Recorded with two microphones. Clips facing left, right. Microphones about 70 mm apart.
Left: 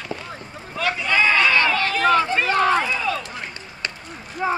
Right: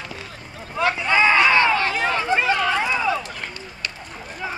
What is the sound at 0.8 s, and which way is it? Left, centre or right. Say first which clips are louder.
Run: right 2 dB; right.